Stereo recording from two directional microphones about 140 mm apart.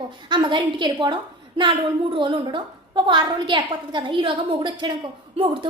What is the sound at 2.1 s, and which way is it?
A woman's voice, 35° right (ahead or behind).